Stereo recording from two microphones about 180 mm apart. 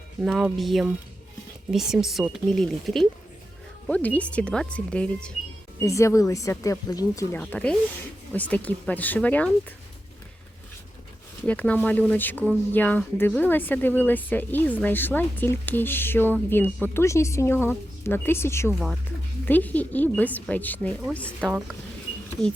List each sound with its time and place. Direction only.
0.2 s speech: 5° right (ahead or behind)
5.8 s speech: 15° left (ahead or behind)
7.4 s speech: 5° left (ahead or behind)
11.4 s speech: 5° left (ahead or behind)
18.7 s speech: centre (ahead or behind)